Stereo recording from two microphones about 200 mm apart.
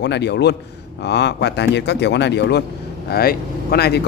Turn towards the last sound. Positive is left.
turn(degrees=55)  # may be behind; listen again after turning